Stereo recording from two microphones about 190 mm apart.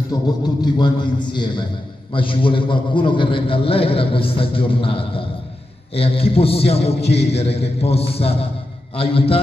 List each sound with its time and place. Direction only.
0.1 s a man's voice: 20° left (ahead or behind)